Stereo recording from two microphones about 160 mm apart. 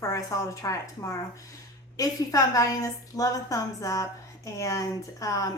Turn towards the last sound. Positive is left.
turn(degrees=20)  # may be behind; listen again after turning